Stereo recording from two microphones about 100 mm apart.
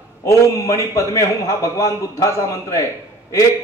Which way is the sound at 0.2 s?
30° left (ahead or behind).